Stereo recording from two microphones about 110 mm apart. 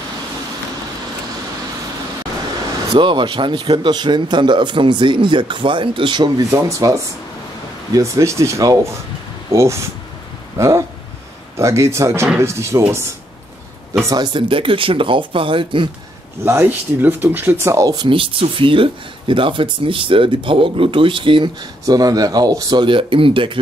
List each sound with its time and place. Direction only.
2.9 s speech: 50° right (ahead or behind); by 9.8 s 25° right (ahead or behind)
11.5 s speech: 25° right (ahead or behind)
14.1 s speech: 45° right (ahead or behind)
16.4 s speech: 20° right (ahead or behind)
17.9 s speech: 50° right (ahead or behind)
21.8 s speech: 35° right (ahead or behind); by 23.6 s 50° right (ahead or behind)